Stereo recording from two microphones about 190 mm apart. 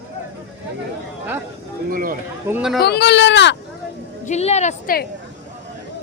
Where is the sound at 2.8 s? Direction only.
60° left (ahead or behind).